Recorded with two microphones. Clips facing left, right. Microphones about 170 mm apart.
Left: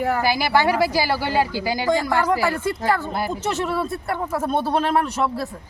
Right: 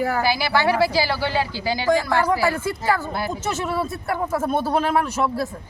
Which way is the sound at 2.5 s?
5° right (ahead or behind).